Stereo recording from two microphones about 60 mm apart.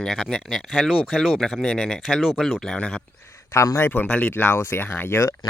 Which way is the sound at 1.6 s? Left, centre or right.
Centre.